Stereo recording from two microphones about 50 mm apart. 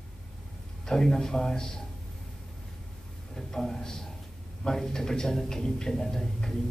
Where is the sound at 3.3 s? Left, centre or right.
Centre.